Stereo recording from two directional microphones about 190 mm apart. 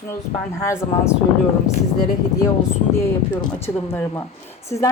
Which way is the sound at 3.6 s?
15° left (ahead or behind).